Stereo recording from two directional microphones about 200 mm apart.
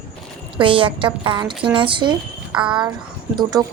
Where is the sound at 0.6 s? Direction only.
25° right (ahead or behind).